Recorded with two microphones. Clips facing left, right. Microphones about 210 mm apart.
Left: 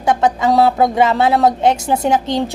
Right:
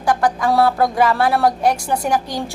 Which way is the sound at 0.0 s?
25° left (ahead or behind).